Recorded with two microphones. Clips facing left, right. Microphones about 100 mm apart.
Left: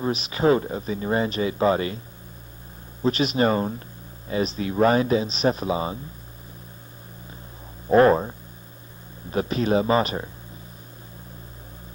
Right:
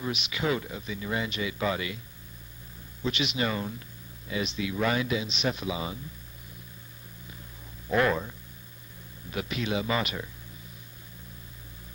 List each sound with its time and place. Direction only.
0.0 s speech: 40° left (ahead or behind)
3.0 s speech: 40° left (ahead or behind)
7.9 s speech: 35° left (ahead or behind)